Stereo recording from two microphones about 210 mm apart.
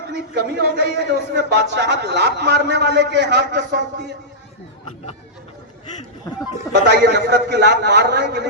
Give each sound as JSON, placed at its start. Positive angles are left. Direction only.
{"t": 0.1, "sound": "speech", "side_deg": -50}
{"t": 6.9, "sound": "speech", "side_deg": -55}